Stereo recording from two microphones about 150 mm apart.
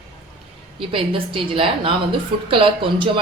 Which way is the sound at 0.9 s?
35° right (ahead or behind).